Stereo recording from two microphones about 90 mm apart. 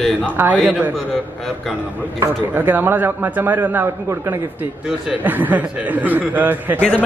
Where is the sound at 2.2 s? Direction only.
25° right (ahead or behind).